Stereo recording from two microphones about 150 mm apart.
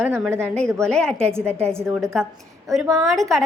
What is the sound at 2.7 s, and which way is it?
Speech, centre (ahead or behind).